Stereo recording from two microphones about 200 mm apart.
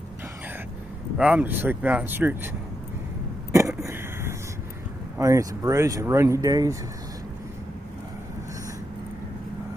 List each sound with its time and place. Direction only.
1.1 s speech: 5° right (ahead or behind)
3.5 s a sound: 15° right (ahead or behind)
5.1 s speech: 15° right (ahead or behind)